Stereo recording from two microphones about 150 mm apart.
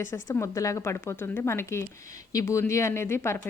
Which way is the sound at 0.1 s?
20° left (ahead or behind).